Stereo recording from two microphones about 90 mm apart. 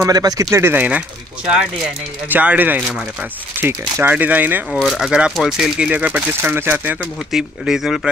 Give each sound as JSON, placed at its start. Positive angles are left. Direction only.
{"t": 0.0, "sound": "speech", "side_deg": -45}
{"t": 2.2, "sound": "speech", "side_deg": -20}
{"t": 4.8, "sound": "speech", "side_deg": -5}
{"t": 7.3, "sound": "speech", "side_deg": -5}